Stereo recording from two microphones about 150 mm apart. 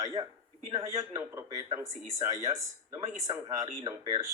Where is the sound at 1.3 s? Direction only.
25° right (ahead or behind).